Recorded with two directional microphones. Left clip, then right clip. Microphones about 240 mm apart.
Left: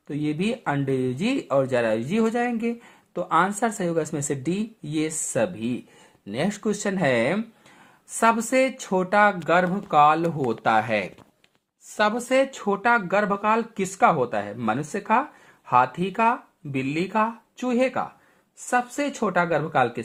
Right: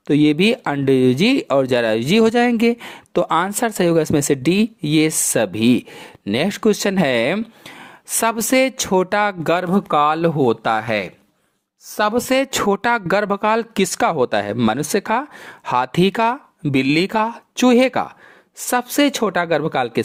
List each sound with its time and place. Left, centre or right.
0.1 s speech: right
9.9 s speech: right
12.3 s speech: right